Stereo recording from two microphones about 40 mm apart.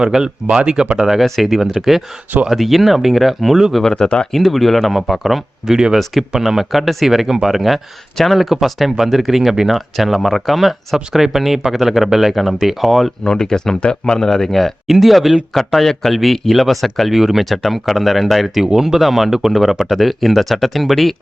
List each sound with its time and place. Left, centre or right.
0.0 s speech: centre
4.0 s speech: left
4.3 s speech: centre
5.6 s speech: centre
13.4 s speech: centre
13.8 s speech: left; by 14.7 s centre
14.8 s speech: centre
17.2 s speech: centre